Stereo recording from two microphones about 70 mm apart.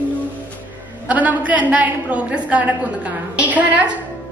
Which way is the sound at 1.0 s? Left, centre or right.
Right.